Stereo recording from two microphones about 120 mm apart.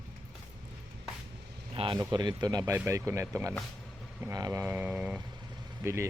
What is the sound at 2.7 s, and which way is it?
Speech, 20° right (ahead or behind).